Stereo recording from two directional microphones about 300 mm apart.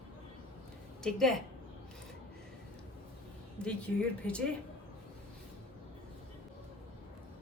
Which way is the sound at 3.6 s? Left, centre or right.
Centre.